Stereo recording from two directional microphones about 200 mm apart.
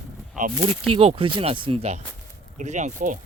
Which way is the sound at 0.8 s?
30° right (ahead or behind).